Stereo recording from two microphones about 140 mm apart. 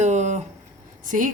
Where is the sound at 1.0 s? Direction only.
70° right (ahead or behind).